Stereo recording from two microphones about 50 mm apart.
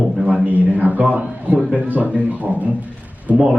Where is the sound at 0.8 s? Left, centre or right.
Right.